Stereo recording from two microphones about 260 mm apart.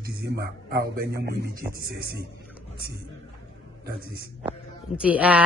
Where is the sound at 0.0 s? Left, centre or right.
Right.